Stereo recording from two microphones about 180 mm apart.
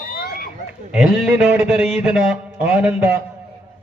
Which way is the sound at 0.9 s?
5° right (ahead or behind).